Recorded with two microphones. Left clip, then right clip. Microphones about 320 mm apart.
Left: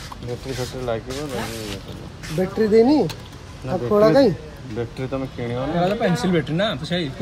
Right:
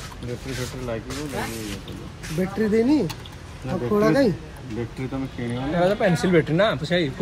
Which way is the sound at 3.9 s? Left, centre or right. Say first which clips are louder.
Left 5 dB; left.